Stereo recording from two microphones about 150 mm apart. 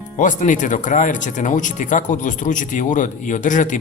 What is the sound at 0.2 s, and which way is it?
Speech, 60° left (ahead or behind).